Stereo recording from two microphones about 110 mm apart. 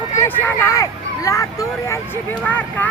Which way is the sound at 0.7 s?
30° left (ahead or behind).